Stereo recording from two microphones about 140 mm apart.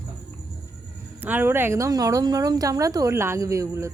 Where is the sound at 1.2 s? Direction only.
15° right (ahead or behind).